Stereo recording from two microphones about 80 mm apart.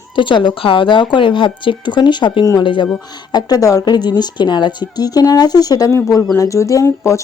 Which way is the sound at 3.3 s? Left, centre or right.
Left.